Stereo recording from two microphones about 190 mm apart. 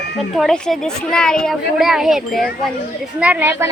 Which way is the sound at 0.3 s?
5° left (ahead or behind).